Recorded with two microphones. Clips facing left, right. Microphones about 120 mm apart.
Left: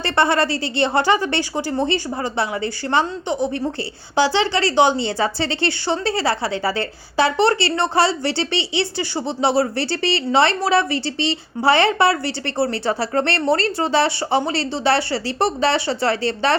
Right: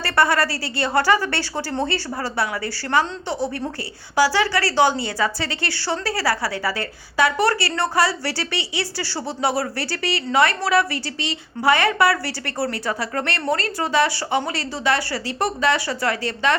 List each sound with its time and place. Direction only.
0.0 s a woman's voice: 25° left (ahead or behind)